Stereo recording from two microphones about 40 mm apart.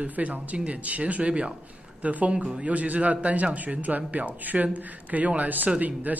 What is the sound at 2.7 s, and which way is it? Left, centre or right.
A man's voice, right.